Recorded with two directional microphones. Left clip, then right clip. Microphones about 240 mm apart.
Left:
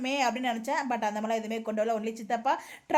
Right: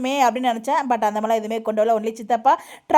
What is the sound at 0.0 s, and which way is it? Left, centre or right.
Speech, right.